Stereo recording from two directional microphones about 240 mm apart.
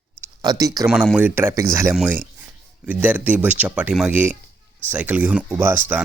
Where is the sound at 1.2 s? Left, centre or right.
Centre.